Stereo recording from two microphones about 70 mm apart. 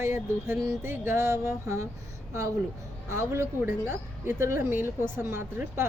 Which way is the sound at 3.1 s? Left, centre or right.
Right.